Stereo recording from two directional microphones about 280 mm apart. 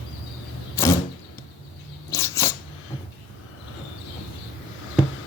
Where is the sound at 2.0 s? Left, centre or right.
Centre.